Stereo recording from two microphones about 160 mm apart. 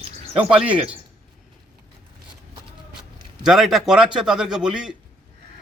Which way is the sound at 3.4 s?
Centre (ahead or behind).